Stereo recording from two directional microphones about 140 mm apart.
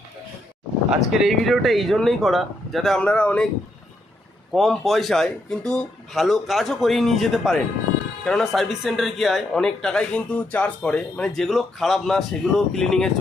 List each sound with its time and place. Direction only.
0.9 s speech: centre (ahead or behind)
4.5 s speech: centre (ahead or behind)